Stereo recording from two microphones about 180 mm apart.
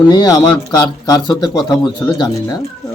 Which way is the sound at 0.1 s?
20° left (ahead or behind).